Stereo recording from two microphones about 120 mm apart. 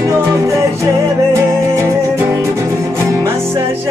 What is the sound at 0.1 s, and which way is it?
Music, 25° right (ahead or behind).